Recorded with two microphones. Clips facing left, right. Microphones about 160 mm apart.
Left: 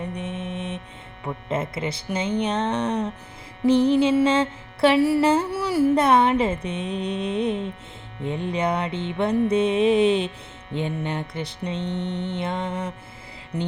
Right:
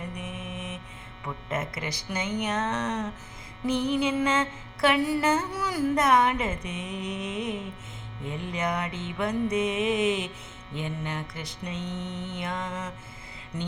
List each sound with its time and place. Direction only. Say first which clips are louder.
0.1 s mantra: left 6 dB; 30° left (ahead or behind)